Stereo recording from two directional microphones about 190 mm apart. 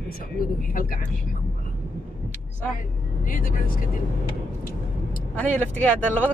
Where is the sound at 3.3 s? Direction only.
45° left (ahead or behind).